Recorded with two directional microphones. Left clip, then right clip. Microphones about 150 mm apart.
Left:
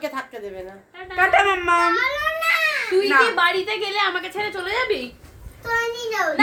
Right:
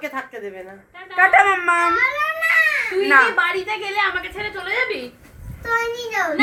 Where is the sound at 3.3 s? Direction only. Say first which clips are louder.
Even; 80° left.